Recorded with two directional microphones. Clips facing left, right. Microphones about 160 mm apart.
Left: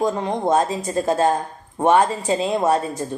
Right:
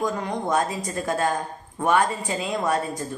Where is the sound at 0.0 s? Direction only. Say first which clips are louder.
Left 5 dB; 25° left (ahead or behind).